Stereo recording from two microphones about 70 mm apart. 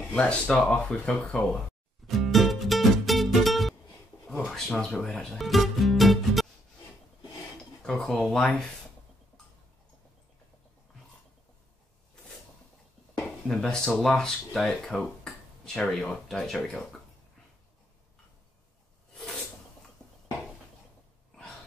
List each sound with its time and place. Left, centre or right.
0.0 s speech: centre
2.0 s music: centre
4.5 s a sound: centre
5.0 s speech: centre
5.4 s music: centre
7.8 s speech: centre
13.5 s speech: centre
20.0 s dishes: centre